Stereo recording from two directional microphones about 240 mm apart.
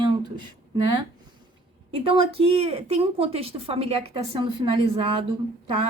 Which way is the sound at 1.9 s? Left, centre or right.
Right.